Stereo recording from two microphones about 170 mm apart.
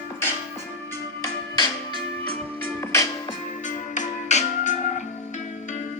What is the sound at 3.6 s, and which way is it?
Music, 45° left (ahead or behind).